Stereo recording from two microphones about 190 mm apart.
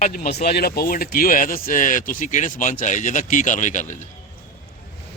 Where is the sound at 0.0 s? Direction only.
50° left (ahead or behind).